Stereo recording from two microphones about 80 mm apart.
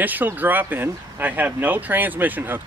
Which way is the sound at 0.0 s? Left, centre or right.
Right.